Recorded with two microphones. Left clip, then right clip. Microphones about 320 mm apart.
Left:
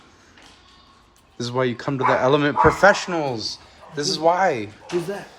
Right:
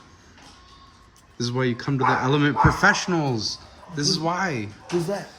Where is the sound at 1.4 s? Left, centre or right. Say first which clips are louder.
Left 3 dB; centre.